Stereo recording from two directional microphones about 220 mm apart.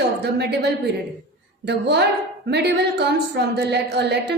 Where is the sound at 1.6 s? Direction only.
50° right (ahead or behind).